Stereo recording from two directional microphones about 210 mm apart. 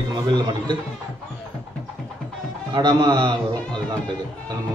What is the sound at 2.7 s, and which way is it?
A man's voice, 20° right (ahead or behind).